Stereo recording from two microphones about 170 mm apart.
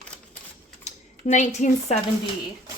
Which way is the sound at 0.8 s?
45° left (ahead or behind).